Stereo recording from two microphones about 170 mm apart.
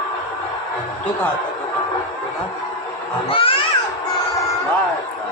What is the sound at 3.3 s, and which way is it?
Speech, 30° left (ahead or behind).